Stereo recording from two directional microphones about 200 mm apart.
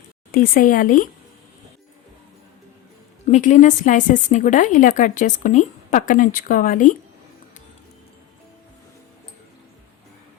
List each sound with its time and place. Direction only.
0.3 s speech: 45° left (ahead or behind)
3.2 s a woman's voice: 40° left (ahead or behind)